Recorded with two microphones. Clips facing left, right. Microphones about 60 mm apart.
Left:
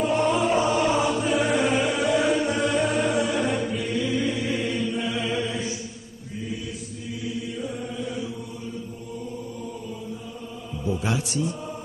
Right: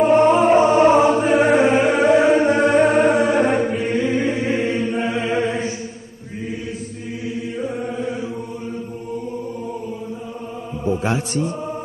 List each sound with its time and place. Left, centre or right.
0.0 s music: right
7.3 s chant: right
10.9 s mantra: right